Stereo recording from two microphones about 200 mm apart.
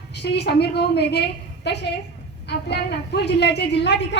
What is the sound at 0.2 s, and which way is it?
Speech, 55° left (ahead or behind).